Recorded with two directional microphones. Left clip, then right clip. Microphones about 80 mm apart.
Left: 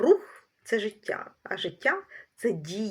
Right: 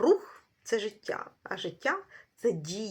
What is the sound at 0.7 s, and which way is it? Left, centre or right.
Speech, right.